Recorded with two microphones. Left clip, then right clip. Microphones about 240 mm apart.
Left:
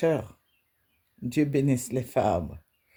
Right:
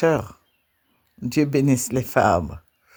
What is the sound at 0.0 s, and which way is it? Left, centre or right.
Speech, right.